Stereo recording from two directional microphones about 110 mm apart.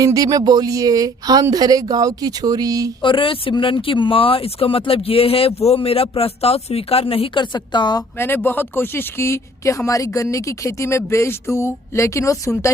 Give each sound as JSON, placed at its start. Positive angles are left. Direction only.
{"t": 0.0, "sound": "speech", "side_deg": -30}
{"t": 3.0, "sound": "speech", "side_deg": 50}
{"t": 8.2, "sound": "speech", "side_deg": 20}